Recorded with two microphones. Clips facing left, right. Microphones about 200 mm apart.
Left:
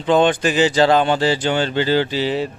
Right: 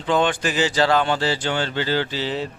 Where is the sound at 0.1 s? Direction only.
20° left (ahead or behind).